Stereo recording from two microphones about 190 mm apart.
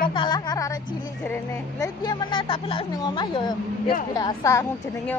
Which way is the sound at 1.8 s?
20° left (ahead or behind).